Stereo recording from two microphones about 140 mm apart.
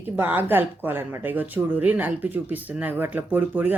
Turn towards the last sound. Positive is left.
turn(degrees=-15)  # may be behind; listen again after turning